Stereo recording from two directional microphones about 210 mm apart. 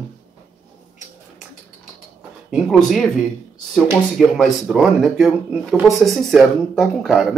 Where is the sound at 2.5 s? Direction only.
Centre (ahead or behind).